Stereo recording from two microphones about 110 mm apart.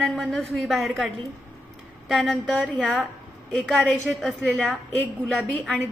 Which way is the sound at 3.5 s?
5° left (ahead or behind).